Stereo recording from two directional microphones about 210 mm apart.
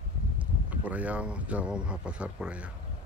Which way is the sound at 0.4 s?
5° right (ahead or behind).